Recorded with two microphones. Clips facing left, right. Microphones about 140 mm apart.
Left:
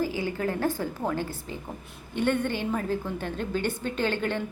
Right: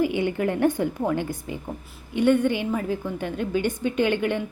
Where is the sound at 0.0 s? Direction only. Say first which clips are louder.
Right 5 dB; 20° right (ahead or behind).